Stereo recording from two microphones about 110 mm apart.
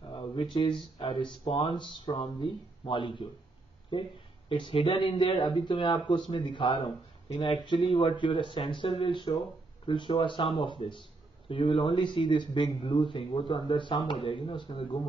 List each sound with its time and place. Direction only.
0.4 s speech: 45° left (ahead or behind)
4.5 s speech: 50° left (ahead or behind)